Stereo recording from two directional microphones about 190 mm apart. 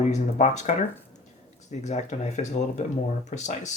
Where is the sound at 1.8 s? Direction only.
35° left (ahead or behind).